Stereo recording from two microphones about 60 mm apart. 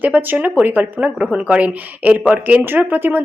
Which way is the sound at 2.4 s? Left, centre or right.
Right.